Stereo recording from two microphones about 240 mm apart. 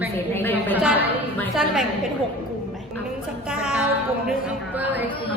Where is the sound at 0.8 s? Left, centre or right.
Centre.